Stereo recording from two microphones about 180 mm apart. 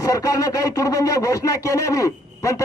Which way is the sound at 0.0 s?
20° left (ahead or behind).